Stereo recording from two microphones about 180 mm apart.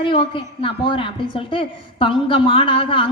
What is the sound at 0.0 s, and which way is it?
A woman's voice, 30° left (ahead or behind).